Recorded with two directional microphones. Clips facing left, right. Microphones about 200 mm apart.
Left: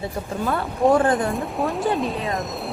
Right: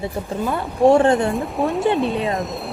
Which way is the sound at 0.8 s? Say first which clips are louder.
Right 4 dB; 25° right (ahead or behind).